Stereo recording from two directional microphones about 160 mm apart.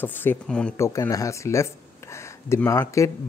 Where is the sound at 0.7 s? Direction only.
20° left (ahead or behind).